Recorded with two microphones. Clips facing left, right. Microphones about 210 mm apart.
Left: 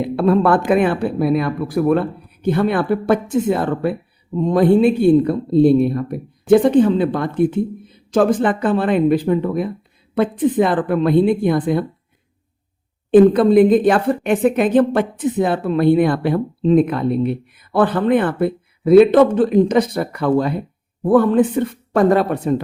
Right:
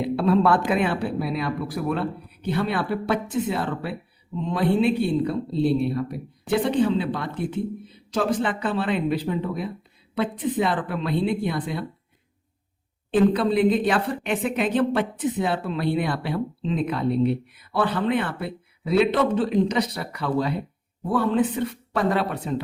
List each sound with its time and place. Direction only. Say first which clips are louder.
0.0 s a woman's voice: left 5 dB; 50° left (ahead or behind)
13.1 s a woman's voice: left 9 dB; 50° left (ahead or behind)